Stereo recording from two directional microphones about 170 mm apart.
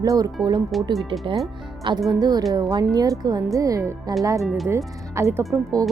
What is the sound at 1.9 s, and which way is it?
Speech, 30° right (ahead or behind).